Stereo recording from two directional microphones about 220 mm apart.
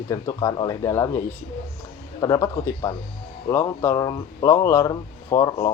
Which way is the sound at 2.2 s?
15° left (ahead or behind).